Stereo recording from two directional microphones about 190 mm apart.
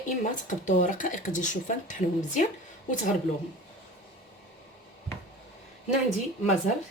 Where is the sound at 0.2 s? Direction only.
45° left (ahead or behind).